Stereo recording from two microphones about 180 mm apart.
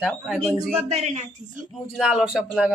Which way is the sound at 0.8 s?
40° right (ahead or behind).